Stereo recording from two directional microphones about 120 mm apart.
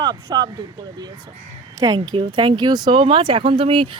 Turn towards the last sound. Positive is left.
turn(degrees=-45)  # may be behind; listen again after turning